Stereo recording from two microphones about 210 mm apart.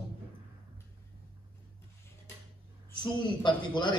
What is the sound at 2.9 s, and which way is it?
A man's voice, 20° left (ahead or behind).